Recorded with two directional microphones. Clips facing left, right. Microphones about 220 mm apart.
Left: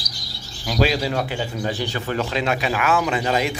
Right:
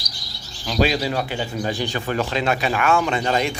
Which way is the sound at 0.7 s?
Centre (ahead or behind).